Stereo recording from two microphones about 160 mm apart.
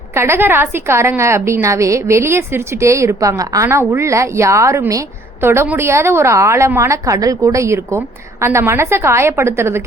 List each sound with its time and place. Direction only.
0.1 s a woman's voice: 15° right (ahead or behind)